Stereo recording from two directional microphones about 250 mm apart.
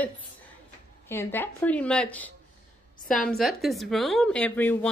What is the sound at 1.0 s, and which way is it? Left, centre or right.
Speech, centre.